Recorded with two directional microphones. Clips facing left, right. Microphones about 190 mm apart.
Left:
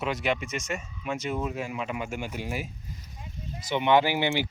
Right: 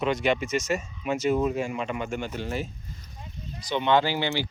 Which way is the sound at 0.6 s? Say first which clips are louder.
Right 5 dB; 40° right (ahead or behind).